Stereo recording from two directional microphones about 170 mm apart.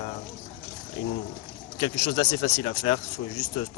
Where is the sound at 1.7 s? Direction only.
35° left (ahead or behind).